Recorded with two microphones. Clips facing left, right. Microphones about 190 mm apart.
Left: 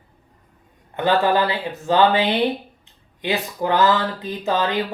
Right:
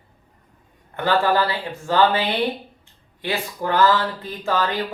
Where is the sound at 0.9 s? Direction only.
20° left (ahead or behind).